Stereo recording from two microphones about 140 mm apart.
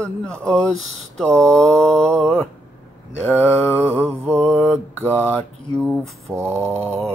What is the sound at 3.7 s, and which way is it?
Mantra, 15° right (ahead or behind).